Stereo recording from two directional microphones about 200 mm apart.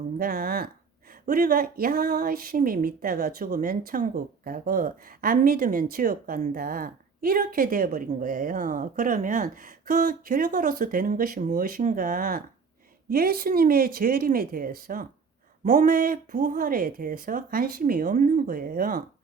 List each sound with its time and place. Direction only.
0.2 s a woman's voice: 45° right (ahead or behind)